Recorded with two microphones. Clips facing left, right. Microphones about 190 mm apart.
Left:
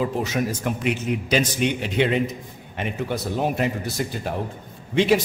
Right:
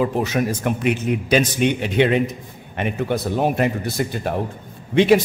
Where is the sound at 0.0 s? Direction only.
60° right (ahead or behind).